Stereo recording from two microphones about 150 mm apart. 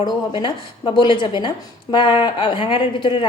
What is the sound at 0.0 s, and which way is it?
A woman's voice, 30° left (ahead or behind).